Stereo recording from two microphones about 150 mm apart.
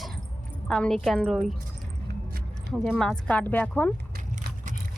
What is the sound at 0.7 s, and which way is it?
Speech, 5° left (ahead or behind).